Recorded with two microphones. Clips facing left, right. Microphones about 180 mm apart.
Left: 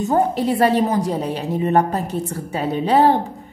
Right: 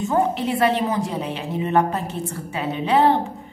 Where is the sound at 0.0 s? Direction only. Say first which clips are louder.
Left 3 dB; 40° left (ahead or behind).